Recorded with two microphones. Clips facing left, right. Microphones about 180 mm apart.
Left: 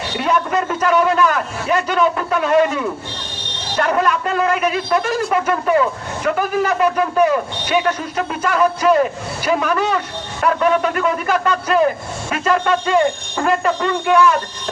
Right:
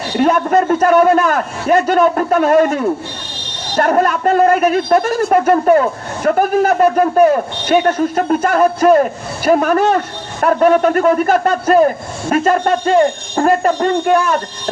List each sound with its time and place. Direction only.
0.2 s a man's voice: 45° right (ahead or behind)